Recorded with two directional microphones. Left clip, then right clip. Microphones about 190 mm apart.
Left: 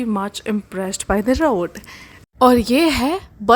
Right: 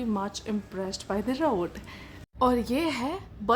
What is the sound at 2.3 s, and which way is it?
A woman's voice, 40° left (ahead or behind).